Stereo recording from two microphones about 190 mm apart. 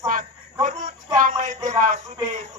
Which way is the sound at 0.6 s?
40° right (ahead or behind).